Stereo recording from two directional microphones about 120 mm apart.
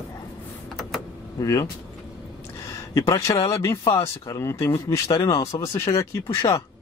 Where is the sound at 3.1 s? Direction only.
25° left (ahead or behind).